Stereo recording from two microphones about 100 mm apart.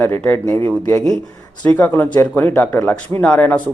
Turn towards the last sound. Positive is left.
turn(degrees=15)  # may be behind; listen again after turning